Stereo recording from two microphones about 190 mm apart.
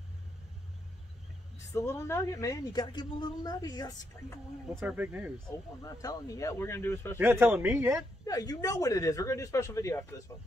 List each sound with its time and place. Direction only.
1.7 s a woman's voice: 15° left (ahead or behind)
4.7 s speech: 10° right (ahead or behind)
5.8 s speech: 20° left (ahead or behind)
7.2 s speech: 10° right (ahead or behind)
8.3 s speech: 20° left (ahead or behind)